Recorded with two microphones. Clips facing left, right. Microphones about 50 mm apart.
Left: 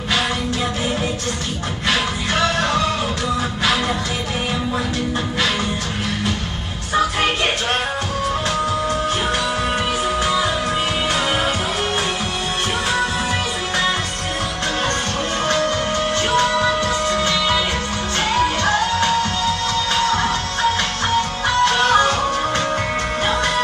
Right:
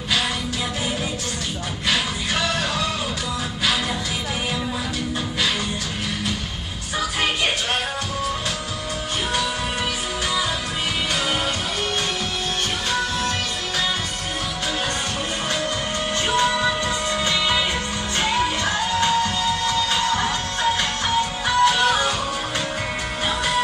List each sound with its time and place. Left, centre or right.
1.9 s music: centre
15.4 s music: centre
23.2 s music: centre